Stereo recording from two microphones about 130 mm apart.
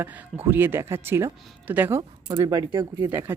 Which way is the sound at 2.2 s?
30° right (ahead or behind).